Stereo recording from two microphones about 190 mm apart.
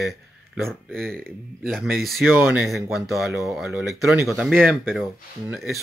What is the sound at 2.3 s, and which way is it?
Speech, 10° right (ahead or behind).